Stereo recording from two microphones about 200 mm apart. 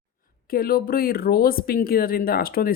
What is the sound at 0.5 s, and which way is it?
Speech, 45° left (ahead or behind).